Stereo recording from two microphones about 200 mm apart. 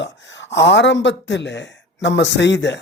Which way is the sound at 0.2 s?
65° left (ahead or behind).